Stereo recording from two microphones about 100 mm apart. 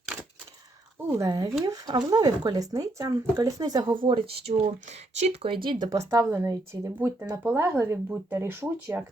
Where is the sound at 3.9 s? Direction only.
60° right (ahead or behind).